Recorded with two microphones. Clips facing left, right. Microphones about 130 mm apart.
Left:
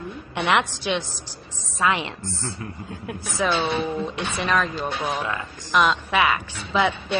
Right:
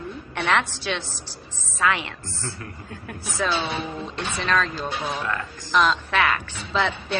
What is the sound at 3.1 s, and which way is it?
A woman's voice, 15° left (ahead or behind).